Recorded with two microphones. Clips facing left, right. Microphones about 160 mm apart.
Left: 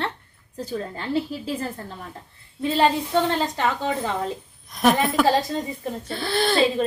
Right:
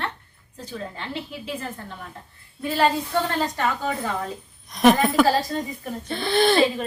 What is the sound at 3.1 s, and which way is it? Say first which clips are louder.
Speech: left 2 dB; 20° left (ahead or behind).